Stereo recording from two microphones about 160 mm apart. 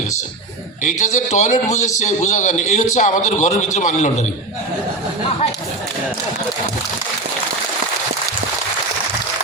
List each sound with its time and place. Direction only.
0.8 s a man's voice: 50° left (ahead or behind)